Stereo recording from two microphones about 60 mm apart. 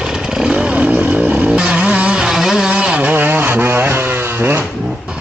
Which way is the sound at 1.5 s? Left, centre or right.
Centre.